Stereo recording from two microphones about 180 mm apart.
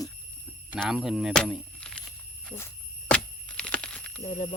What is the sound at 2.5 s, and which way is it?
Squeal, 45° left (ahead or behind).